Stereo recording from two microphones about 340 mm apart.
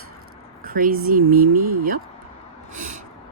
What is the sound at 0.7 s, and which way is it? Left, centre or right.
Speech, right.